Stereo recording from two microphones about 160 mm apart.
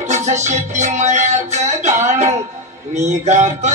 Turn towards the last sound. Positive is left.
turn(degrees=-45)  # may be behind; listen again after turning